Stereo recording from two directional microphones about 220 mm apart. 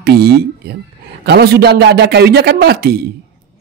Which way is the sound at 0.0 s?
45° right (ahead or behind).